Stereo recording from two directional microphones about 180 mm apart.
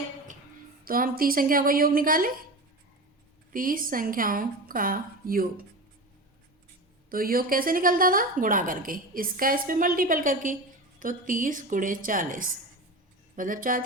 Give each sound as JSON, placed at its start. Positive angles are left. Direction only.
{"t": 0.9, "sound": "a woman's voice", "side_deg": -55}
{"t": 3.5, "sound": "a woman's voice", "side_deg": -50}
{"t": 7.1, "sound": "a woman's voice", "side_deg": -55}